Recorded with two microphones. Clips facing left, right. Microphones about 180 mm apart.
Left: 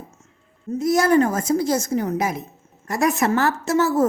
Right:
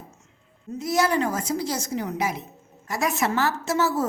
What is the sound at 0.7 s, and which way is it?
A woman's voice, 50° left (ahead or behind).